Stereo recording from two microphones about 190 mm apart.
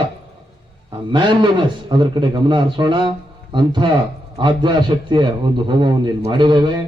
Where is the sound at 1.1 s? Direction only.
25° right (ahead or behind).